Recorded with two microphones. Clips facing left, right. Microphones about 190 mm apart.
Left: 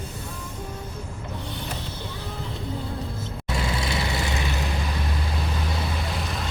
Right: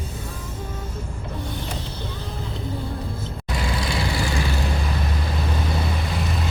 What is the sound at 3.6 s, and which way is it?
Vehicle, 25° left (ahead or behind).